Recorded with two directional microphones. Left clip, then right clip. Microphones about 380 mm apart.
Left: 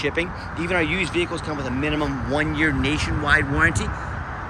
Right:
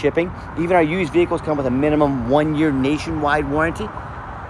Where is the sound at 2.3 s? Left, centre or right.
Right.